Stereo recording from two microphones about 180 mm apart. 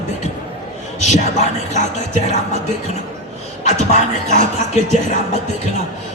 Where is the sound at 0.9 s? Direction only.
40° left (ahead or behind).